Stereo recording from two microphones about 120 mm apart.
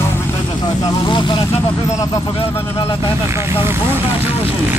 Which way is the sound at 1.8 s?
25° left (ahead or behind).